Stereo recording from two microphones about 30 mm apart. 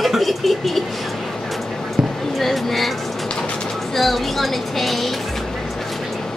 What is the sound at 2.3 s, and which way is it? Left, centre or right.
Speech, centre.